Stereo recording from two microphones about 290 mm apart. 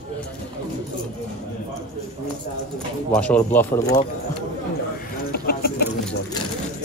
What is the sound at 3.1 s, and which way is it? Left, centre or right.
Speech, centre.